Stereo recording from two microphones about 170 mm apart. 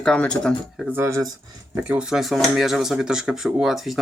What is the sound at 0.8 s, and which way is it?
Speech, 10° right (ahead or behind).